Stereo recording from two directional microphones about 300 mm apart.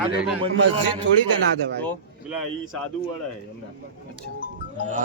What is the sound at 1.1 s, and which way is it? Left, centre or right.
Speech, right.